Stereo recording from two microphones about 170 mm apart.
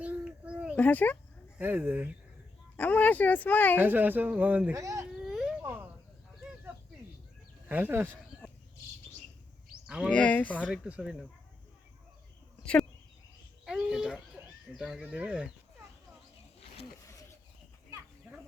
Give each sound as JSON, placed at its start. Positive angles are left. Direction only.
{"t": 0.0, "sound": "a sound", "side_deg": -10}
{"t": 0.8, "sound": "speech", "side_deg": 10}
{"t": 1.5, "sound": "speech", "side_deg": -10}
{"t": 2.7, "sound": "speech", "side_deg": 10}
{"t": 3.8, "sound": "speech", "side_deg": -10}
{"t": 5.2, "sound": "baby cry", "side_deg": 0}
{"t": 5.6, "sound": "a sound", "side_deg": -15}
{"t": 7.7, "sound": "speech", "side_deg": -10}
{"t": 9.8, "sound": "a sound", "side_deg": -5}
{"t": 10.1, "sound": "speech", "side_deg": 5}
{"t": 10.8, "sound": "speech", "side_deg": -5}
{"t": 13.7, "sound": "a sound", "side_deg": -5}